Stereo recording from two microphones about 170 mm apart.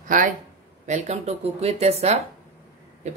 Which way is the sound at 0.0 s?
50° right (ahead or behind).